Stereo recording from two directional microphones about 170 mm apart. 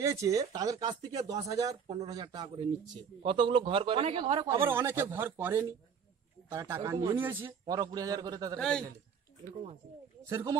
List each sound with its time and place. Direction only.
0.0 s speech: 15° right (ahead or behind)
8.5 s a man's voice: 5° left (ahead or behind)
10.3 s speech: 20° right (ahead or behind)